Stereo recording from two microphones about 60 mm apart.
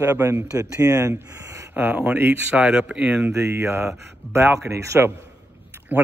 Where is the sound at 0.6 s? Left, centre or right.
Right.